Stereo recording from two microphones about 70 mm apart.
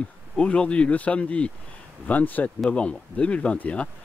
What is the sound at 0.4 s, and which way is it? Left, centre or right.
Speech, centre.